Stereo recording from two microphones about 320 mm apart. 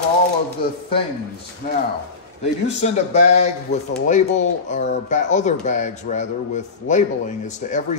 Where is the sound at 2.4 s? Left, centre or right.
Left.